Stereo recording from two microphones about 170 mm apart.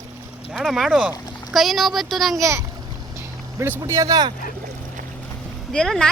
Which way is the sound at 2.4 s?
20° right (ahead or behind).